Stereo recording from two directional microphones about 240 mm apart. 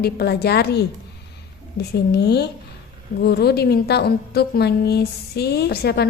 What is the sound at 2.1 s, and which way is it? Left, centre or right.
A woman's voice, left.